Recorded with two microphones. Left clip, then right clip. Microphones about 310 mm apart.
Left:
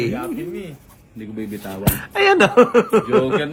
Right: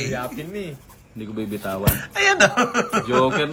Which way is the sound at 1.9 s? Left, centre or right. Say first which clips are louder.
Left 4 dB; centre.